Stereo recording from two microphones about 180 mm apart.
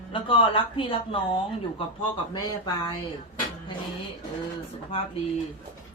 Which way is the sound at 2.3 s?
20° left (ahead or behind).